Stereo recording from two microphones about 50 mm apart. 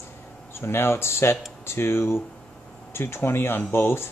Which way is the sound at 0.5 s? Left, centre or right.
Left.